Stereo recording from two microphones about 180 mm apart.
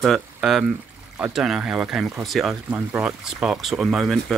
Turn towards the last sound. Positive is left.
turn(degrees=0)  # may be behind; listen again after turning